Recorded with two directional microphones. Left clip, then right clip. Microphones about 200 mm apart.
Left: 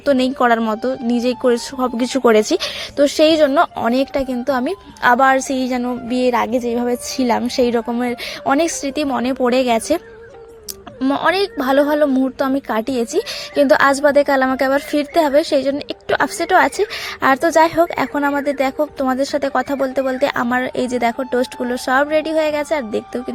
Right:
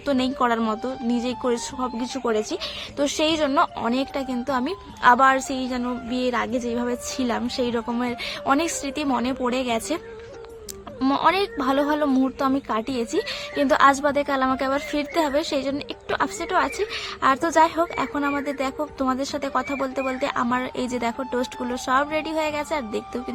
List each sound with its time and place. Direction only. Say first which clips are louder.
0.0 s a woman's voice: left 7 dB; 25° left (ahead or behind)
3.0 s a woman's voice: left 10 dB; 25° left (ahead or behind)
11.0 s a woman's voice: left 4 dB; 20° left (ahead or behind)